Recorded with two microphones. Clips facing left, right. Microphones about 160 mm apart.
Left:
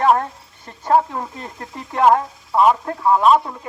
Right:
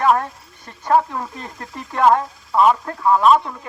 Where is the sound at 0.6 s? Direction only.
20° left (ahead or behind).